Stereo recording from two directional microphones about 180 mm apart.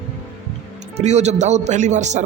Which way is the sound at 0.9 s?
40° right (ahead or behind).